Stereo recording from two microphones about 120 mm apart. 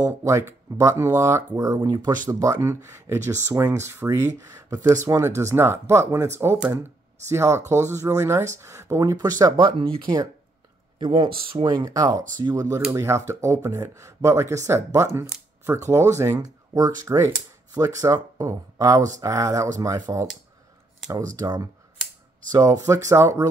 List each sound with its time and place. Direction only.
0.0 s speech: 25° right (ahead or behind)
2.2 s speech: 25° right (ahead or behind)
9.6 s speech: 45° right (ahead or behind)
11.7 s speech: 30° right (ahead or behind)
21.4 s speech: 35° right (ahead or behind)